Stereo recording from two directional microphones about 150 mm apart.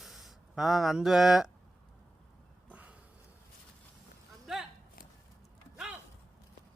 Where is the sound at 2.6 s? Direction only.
10° right (ahead or behind).